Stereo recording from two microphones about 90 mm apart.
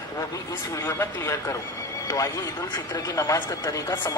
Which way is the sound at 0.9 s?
30° left (ahead or behind).